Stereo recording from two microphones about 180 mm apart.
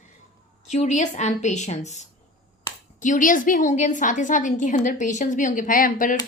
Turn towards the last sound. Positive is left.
turn(degrees=50)  # may be behind; listen again after turning